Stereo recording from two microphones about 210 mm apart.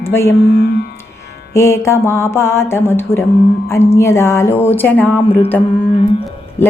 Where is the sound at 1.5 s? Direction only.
15° left (ahead or behind).